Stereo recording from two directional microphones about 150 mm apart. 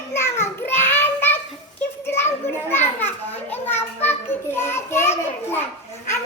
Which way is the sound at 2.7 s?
15° left (ahead or behind).